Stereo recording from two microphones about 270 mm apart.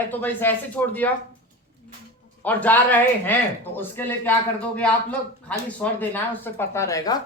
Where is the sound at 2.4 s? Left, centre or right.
Centre.